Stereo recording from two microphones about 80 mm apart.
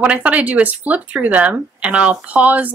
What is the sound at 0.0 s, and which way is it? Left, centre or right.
Speech, centre.